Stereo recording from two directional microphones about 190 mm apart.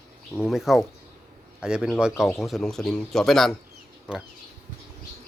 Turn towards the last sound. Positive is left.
turn(degrees=-5)  # may be behind; listen again after turning